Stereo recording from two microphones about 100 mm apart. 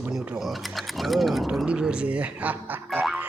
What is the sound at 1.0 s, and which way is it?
A man's voice, centre (ahead or behind).